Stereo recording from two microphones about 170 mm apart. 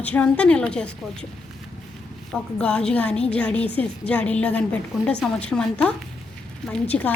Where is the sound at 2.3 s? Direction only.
5° left (ahead or behind).